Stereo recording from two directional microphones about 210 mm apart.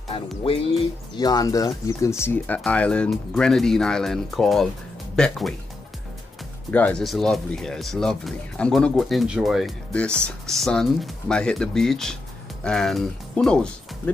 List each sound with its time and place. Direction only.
0.1 s music: 25° left (ahead or behind)
1.1 s speech: 20° left (ahead or behind)
6.7 s speech: 5° left (ahead or behind)